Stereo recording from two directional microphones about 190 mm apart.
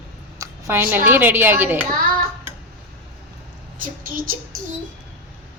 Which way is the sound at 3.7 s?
45° right (ahead or behind).